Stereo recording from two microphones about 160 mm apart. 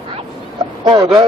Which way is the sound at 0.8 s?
25° right (ahead or behind).